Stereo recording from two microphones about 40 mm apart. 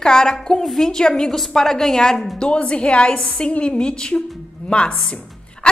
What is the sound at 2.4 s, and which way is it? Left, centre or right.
A woman's voice, left.